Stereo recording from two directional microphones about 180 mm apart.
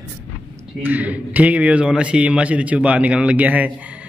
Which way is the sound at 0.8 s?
10° right (ahead or behind).